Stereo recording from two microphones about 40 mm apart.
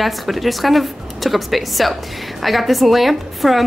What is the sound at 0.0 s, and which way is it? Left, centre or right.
A woman's voice, centre.